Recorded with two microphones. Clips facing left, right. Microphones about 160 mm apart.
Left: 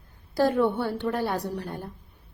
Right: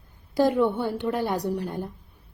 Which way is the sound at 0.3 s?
15° right (ahead or behind).